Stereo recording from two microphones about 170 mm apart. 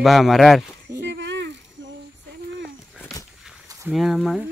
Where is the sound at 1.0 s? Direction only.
90° right.